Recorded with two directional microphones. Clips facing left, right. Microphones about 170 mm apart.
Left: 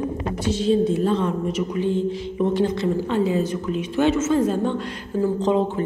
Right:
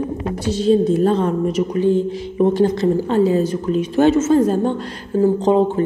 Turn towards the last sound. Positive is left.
turn(degrees=-35)  # may be behind; listen again after turning